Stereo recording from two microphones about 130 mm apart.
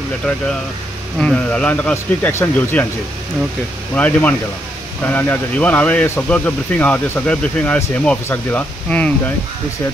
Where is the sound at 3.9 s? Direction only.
10° left (ahead or behind).